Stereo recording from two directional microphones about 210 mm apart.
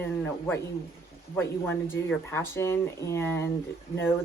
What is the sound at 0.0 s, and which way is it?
Speech, 10° left (ahead or behind).